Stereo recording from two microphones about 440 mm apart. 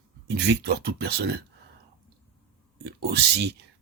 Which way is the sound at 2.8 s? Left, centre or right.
Right.